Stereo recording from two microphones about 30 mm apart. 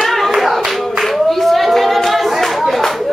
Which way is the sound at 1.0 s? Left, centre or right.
Centre.